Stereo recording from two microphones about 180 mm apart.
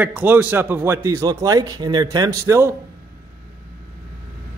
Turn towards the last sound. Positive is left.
turn(degrees=-15)  # may be behind; listen again after turning